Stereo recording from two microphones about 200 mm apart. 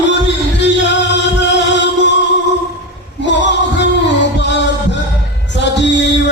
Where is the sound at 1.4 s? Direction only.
60° left (ahead or behind).